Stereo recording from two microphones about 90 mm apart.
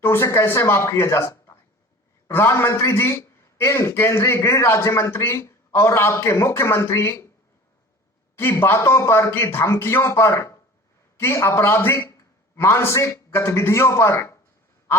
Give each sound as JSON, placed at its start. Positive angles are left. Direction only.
{"t": 0.0, "sound": "a man's voice", "side_deg": 30}
{"t": 8.4, "sound": "a man's voice", "side_deg": 25}